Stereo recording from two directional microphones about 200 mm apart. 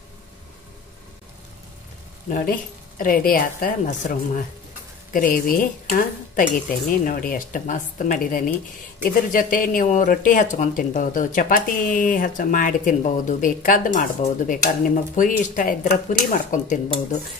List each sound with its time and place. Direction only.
2.2 s a woman's voice: 45° left (ahead or behind)